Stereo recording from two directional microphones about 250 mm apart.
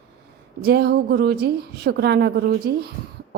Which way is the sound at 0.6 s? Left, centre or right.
Right.